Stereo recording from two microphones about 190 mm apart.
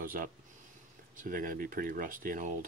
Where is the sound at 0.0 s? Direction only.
50° right (ahead or behind).